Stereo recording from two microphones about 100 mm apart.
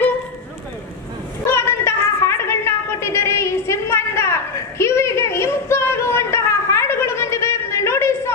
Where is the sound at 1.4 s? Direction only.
25° left (ahead or behind).